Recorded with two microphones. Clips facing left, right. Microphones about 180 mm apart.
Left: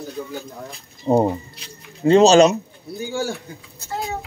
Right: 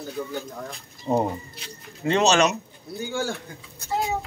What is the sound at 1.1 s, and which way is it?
Speech, 25° left (ahead or behind).